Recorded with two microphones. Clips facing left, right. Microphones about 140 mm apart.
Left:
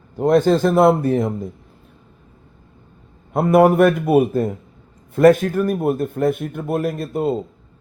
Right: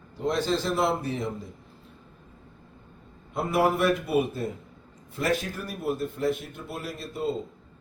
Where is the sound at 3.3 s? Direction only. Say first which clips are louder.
Left 11 dB; 55° left (ahead or behind).